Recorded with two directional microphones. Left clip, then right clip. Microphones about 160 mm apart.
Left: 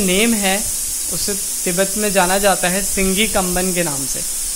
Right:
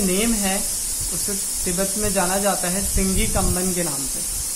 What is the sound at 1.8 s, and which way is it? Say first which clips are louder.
Speech: left 7 dB; 45° left (ahead or behind).